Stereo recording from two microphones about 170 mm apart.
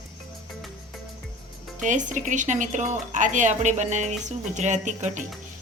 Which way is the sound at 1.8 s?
45° right (ahead or behind).